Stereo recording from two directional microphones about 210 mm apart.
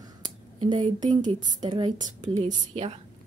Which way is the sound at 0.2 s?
20° right (ahead or behind).